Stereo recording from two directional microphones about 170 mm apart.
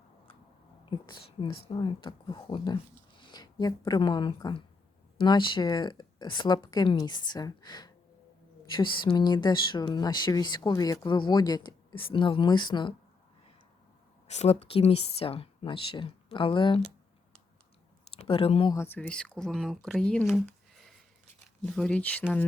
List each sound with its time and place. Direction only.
0.9 s speech: 25° left (ahead or behind)
14.3 s speech: 40° left (ahead or behind)
18.2 s speech: 35° left (ahead or behind)
18.7 s speech: 15° left (ahead or behind)